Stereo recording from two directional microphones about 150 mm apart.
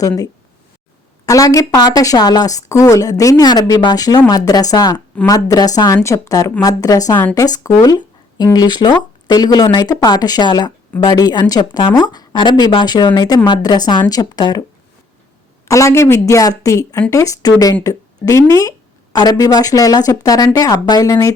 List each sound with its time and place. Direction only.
1.2 s a woman's voice: 20° left (ahead or behind)
15.6 s a woman's voice: 20° left (ahead or behind)